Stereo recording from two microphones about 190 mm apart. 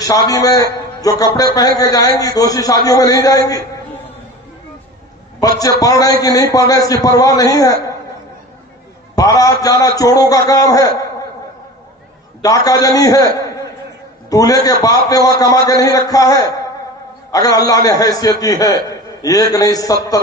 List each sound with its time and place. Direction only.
0.3 s a man's voice: 20° left (ahead or behind)
5.4 s a man's voice: 20° left (ahead or behind)
9.1 s a man's voice: 20° left (ahead or behind)
12.4 s a man's voice: 20° left (ahead or behind)